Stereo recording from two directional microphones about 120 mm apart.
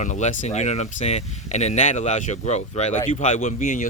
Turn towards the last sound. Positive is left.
turn(degrees=90)